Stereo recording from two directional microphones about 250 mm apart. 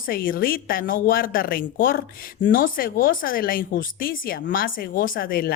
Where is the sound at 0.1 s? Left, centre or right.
Left.